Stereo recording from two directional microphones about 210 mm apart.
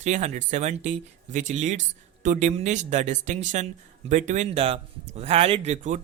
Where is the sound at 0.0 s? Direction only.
35° right (ahead or behind).